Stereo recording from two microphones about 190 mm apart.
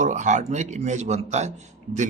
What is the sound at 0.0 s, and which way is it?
Speech, 40° right (ahead or behind).